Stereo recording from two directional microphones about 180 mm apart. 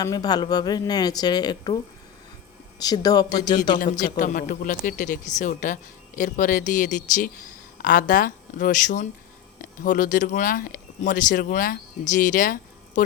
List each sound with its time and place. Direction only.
0.0 s speech: 20° left (ahead or behind)
4.2 s speech: 45° left (ahead or behind)